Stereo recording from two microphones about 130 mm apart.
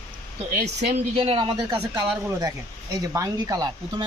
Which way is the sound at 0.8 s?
60° right (ahead or behind).